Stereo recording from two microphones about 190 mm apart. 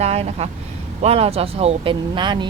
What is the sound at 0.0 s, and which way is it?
Speech, 35° right (ahead or behind).